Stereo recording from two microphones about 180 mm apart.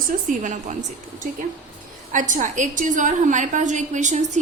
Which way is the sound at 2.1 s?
45° right (ahead or behind).